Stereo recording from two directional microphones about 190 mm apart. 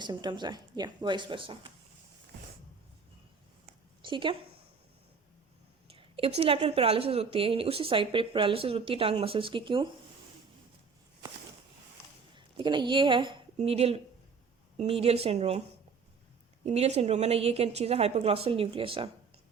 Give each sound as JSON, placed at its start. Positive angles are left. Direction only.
{"t": 0.0, "sound": "speech", "side_deg": -20}
{"t": 4.0, "sound": "a woman's voice", "side_deg": -25}
{"t": 5.9, "sound": "speech", "side_deg": -30}
{"t": 12.3, "sound": "speech", "side_deg": -25}
{"t": 16.6, "sound": "speech", "side_deg": -35}